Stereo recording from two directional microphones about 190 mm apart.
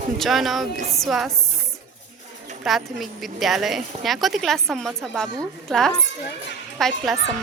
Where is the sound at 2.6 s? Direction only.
Centre (ahead or behind).